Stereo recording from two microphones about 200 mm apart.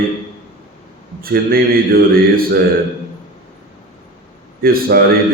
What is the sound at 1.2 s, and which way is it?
Speech, 50° right (ahead or behind).